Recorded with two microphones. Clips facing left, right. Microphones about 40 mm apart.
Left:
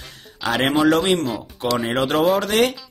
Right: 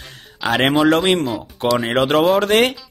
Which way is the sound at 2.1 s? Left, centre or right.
Right.